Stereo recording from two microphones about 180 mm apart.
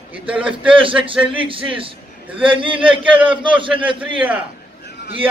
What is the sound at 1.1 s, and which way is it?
A man's voice, 30° right (ahead or behind).